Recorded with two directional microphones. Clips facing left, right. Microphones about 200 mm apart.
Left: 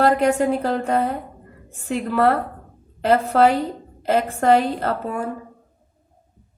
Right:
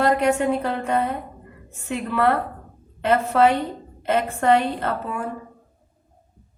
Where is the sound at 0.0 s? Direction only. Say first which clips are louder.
Left 2 dB; 35° left (ahead or behind).